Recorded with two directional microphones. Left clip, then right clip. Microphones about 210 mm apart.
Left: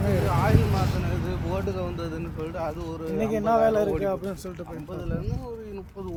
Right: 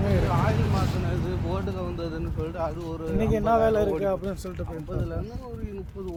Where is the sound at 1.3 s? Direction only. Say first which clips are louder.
Left 1 dB; 45° left (ahead or behind).